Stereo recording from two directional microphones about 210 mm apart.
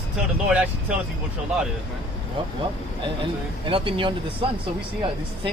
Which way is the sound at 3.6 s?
25° right (ahead or behind).